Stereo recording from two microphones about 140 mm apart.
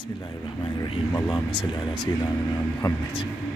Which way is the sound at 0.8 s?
25° left (ahead or behind).